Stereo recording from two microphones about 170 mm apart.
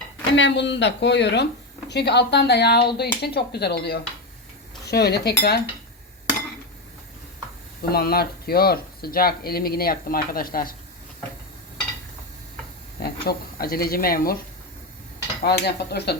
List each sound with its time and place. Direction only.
0.3 s speech: 90° left; by 5.6 s 70° left (ahead or behind)
7.9 s speech: 65° left (ahead or behind)
13.0 s speech: 65° left (ahead or behind)
15.4 s speech: 75° left (ahead or behind)